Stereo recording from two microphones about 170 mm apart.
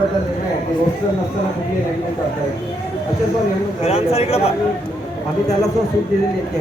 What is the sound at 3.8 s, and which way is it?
Speech, 40° left (ahead or behind).